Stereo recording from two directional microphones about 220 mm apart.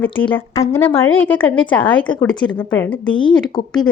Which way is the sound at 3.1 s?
20° left (ahead or behind).